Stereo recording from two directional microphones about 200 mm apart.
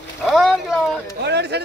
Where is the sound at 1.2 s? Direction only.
55° right (ahead or behind).